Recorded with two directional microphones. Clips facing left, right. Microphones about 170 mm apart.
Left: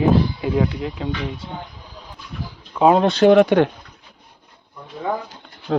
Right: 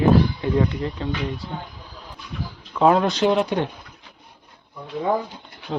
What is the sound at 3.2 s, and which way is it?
Speech, 65° left (ahead or behind).